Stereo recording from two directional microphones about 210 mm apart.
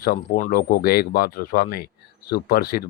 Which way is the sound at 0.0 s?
45° left (ahead or behind).